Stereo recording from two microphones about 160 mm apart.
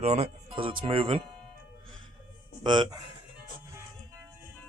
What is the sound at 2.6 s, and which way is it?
Speech, 30° right (ahead or behind).